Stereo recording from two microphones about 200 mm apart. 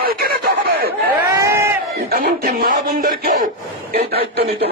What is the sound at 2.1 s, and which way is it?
Speech, 50° right (ahead or behind).